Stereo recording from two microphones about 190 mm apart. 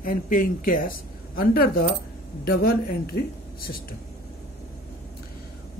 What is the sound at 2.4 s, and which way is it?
A woman's voice, 55° left (ahead or behind).